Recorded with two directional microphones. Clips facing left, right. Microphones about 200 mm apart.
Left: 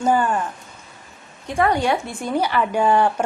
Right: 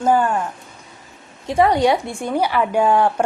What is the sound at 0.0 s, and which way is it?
Speech, 5° right (ahead or behind).